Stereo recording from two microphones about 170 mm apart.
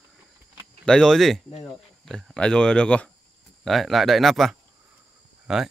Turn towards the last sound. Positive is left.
turn(degrees=-5)  # may be behind; listen again after turning